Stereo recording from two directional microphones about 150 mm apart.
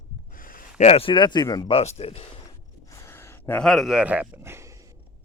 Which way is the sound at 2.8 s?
20° left (ahead or behind).